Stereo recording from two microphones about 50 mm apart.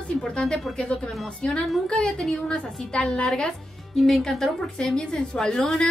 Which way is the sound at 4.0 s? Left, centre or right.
Centre.